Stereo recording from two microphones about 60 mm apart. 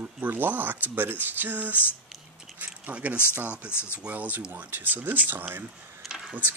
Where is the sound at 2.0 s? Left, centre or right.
Centre.